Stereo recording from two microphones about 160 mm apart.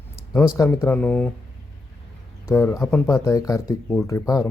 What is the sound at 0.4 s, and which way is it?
Speech, 20° left (ahead or behind).